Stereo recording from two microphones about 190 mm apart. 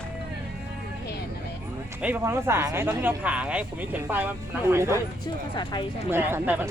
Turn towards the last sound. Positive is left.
turn(degrees=-10)  # may be behind; listen again after turning